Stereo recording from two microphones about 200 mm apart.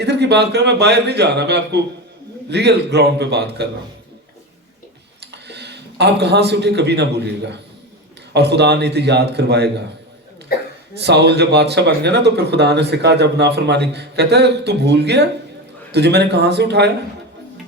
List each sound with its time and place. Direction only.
0.0 s speech: 55° right (ahead or behind)
5.2 s speech: 55° right (ahead or behind)
10.5 s cough: 50° left (ahead or behind)
11.0 s speech: 55° right (ahead or behind)